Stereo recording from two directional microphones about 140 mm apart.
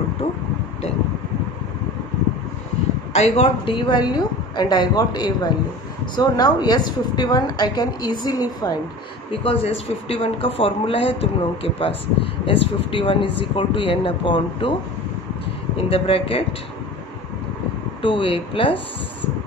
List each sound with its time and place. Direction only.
3.1 s a woman's voice: 50° left (ahead or behind); by 8.7 s 25° left (ahead or behind)
9.4 s a woman's voice: 45° left (ahead or behind)
15.7 s speech: 45° left (ahead or behind)
18.0 s a woman's voice: 35° left (ahead or behind)